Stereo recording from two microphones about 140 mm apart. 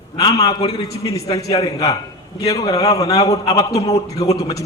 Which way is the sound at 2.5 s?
25° left (ahead or behind).